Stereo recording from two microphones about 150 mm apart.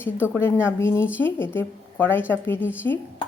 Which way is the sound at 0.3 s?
15° left (ahead or behind).